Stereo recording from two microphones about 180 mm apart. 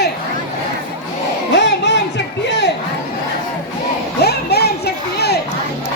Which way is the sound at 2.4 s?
70° left (ahead or behind).